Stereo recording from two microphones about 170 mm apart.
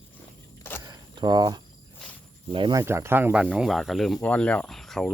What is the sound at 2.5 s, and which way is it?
Speech, 25° right (ahead or behind).